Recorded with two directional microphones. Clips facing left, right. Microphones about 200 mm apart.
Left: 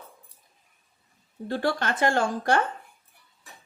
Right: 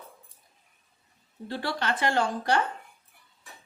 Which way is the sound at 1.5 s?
50° left (ahead or behind).